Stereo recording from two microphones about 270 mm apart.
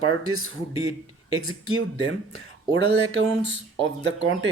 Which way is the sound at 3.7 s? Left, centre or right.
Right.